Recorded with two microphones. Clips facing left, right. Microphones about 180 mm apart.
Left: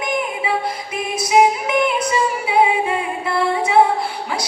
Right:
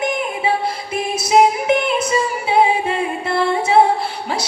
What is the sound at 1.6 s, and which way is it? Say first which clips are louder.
Music: right 1 dB; 25° right (ahead or behind).